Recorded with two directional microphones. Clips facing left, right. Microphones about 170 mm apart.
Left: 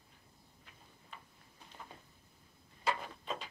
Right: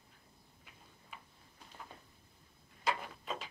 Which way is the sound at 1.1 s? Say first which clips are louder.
Even; 10° right (ahead or behind).